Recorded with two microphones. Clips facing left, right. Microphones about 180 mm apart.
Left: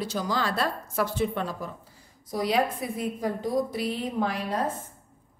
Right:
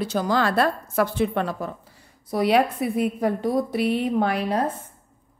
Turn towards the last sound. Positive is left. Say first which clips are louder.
# right 6 dB
turn(degrees=-65)  # may be behind; listen again after turning